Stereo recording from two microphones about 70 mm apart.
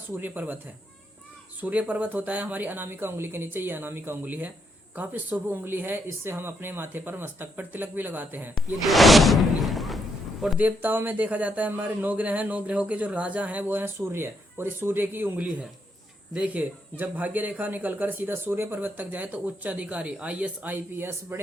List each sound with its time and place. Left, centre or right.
0.1 s speech: right
1.6 s speech: right
8.5 s speech: centre
9.6 s a sound: centre
10.6 s speech: right
15.4 s a man's voice: centre; by 21.4 s right